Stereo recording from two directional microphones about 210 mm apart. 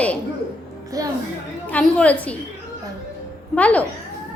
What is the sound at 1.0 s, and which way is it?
Speech, 15° right (ahead or behind).